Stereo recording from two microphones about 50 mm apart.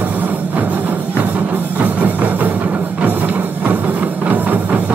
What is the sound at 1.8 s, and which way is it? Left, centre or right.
Music, right.